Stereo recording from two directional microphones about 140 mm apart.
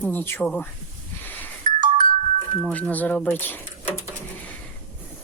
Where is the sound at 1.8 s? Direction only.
70° right (ahead or behind).